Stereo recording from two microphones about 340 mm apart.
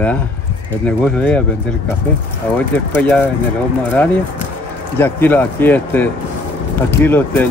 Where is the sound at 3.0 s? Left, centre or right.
Centre.